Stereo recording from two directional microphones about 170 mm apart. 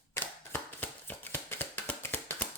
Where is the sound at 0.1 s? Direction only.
10° left (ahead or behind).